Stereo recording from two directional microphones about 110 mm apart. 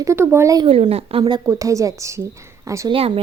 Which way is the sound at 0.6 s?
60° right (ahead or behind).